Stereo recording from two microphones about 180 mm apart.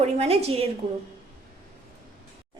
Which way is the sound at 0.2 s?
35° right (ahead or behind).